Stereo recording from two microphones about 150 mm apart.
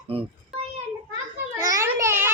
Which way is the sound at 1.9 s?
15° right (ahead or behind).